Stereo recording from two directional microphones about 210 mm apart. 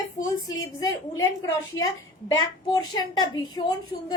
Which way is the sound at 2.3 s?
20° left (ahead or behind).